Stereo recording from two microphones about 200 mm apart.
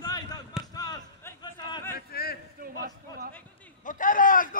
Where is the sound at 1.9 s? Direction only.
50° left (ahead or behind).